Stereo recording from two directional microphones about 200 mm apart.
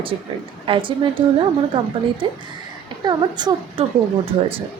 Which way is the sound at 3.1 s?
20° right (ahead or behind).